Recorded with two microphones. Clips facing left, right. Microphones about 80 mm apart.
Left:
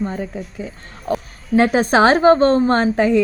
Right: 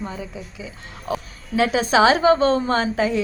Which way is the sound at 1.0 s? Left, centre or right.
Centre.